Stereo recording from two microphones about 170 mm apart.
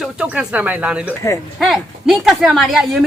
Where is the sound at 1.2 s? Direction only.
15° left (ahead or behind).